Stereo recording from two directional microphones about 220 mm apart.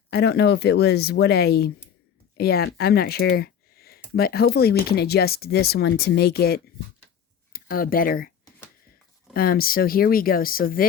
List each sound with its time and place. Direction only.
0.1 s speech: 50° left (ahead or behind)
9.3 s speech: 40° left (ahead or behind)